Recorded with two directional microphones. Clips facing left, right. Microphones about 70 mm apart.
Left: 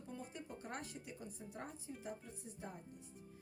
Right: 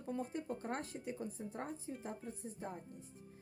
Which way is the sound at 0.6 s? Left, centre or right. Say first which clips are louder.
Right 5 dB; right.